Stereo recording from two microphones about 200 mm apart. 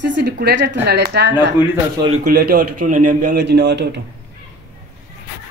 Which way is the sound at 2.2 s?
50° right (ahead or behind).